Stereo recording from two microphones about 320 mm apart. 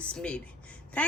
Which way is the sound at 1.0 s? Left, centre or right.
Centre.